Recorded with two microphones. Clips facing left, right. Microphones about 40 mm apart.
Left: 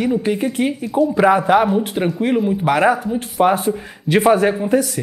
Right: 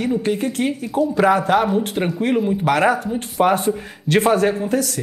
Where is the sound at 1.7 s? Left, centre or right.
Centre.